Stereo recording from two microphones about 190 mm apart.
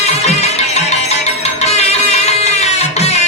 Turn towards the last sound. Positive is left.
turn(degrees=35)  # may be behind; listen again after turning